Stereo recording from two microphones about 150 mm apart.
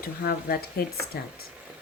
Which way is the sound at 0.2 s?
90° left.